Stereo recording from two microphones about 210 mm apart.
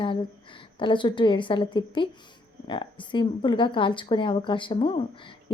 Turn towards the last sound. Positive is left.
turn(degrees=25)  # may be behind; listen again after turning